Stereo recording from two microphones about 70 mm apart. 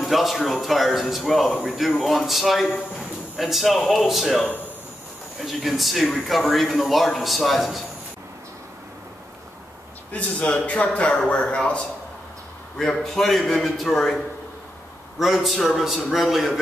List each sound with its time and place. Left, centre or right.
0.0 s a man's voice: centre
10.1 s a man's voice: centre